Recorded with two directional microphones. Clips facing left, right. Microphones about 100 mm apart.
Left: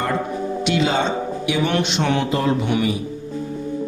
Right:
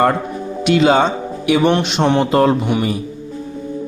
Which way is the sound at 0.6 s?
60° right (ahead or behind).